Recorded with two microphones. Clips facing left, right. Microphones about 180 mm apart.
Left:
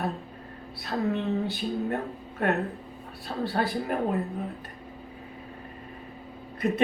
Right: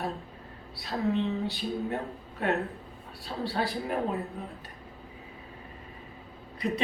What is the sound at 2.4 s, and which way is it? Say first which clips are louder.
Speech: left 2 dB; 55° left (ahead or behind).